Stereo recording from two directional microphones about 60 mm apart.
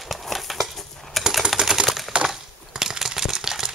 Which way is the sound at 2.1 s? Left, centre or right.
Centre.